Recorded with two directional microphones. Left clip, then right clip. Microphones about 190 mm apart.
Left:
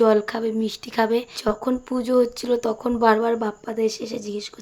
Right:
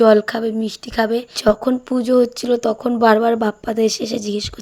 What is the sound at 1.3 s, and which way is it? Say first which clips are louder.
Speech: right 7 dB; 25° right (ahead or behind).